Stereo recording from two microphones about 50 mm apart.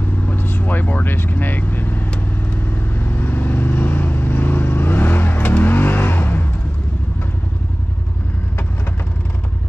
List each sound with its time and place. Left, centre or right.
0.3 s vehicle: left